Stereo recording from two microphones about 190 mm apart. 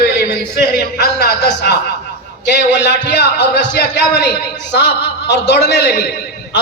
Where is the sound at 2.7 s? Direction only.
70° left (ahead or behind).